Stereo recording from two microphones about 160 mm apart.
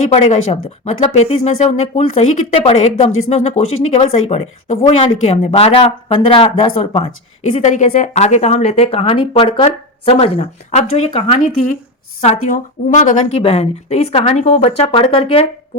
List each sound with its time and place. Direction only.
0.1 s speech: 45° left (ahead or behind)
12.2 s speech: 50° left (ahead or behind)